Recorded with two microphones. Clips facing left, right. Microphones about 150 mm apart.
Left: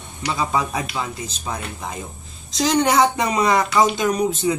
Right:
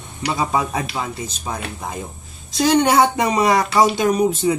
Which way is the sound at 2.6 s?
5° right (ahead or behind).